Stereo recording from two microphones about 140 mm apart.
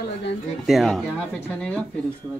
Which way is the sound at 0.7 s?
Centre (ahead or behind).